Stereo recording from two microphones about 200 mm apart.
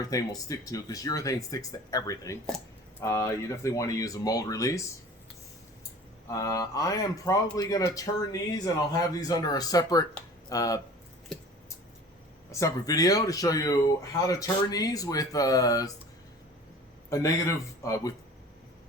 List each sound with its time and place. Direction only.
0.0 s speech: 15° left (ahead or behind)
6.2 s speech: 15° left (ahead or behind)
12.5 s speech: 15° left (ahead or behind)
17.1 s speech: 15° left (ahead or behind)